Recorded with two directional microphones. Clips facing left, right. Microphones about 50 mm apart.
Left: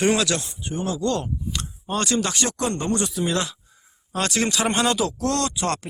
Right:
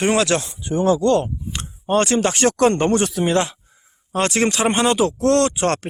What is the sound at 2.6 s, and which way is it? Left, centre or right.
Speech, right.